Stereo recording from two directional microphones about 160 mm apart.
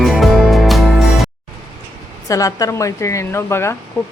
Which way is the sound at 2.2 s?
20° left (ahead or behind).